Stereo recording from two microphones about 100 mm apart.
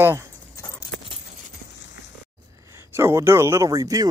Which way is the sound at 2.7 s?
25° right (ahead or behind).